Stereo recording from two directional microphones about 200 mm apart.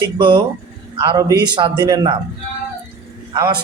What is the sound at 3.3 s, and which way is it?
Speech, 20° right (ahead or behind).